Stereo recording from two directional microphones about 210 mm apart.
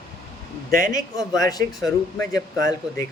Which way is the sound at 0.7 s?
40° right (ahead or behind).